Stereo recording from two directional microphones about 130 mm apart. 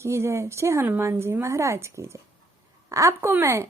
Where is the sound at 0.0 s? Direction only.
20° right (ahead or behind).